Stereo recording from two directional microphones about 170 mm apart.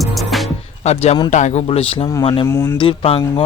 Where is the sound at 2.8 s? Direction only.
30° left (ahead or behind).